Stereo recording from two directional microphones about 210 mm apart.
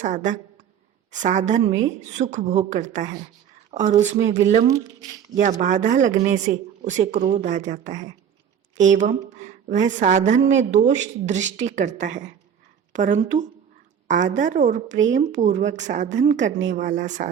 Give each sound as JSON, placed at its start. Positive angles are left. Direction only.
{"t": 0.0, "sound": "speech", "side_deg": -35}
{"t": 5.4, "sound": "speech", "side_deg": -35}